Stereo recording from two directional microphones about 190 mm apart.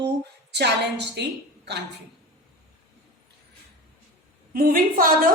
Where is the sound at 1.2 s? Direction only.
60° right (ahead or behind).